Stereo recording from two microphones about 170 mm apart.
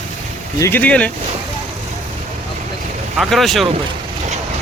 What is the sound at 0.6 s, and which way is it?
Speech, 10° left (ahead or behind).